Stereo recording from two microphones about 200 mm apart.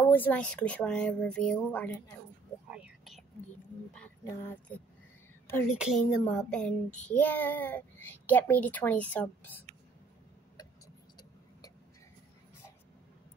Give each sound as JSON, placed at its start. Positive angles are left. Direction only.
{"t": 0.0, "sound": "a child's voice", "side_deg": 10}
{"t": 2.7, "sound": "whispering", "side_deg": -5}
{"t": 4.2, "sound": "a child's voice", "side_deg": 15}
{"t": 5.7, "sound": "a woman's voice", "side_deg": -5}
{"t": 6.0, "sound": "speech", "side_deg": 20}
{"t": 6.3, "sound": "a woman's voice", "side_deg": 5}